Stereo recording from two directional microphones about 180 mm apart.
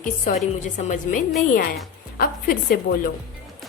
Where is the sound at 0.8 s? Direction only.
40° left (ahead or behind).